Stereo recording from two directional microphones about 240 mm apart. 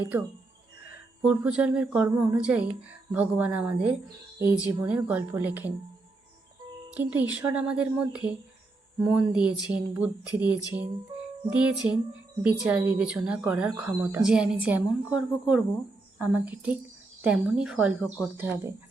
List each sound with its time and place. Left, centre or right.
0.0 s a woman's voice: centre
6.9 s a woman's voice: centre